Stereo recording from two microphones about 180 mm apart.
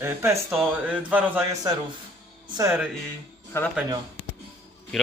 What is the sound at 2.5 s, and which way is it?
Speech, 15° right (ahead or behind).